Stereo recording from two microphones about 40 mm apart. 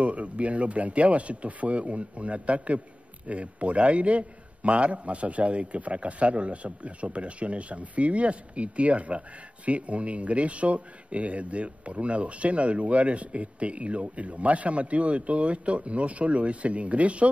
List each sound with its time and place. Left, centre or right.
0.0 s speech: right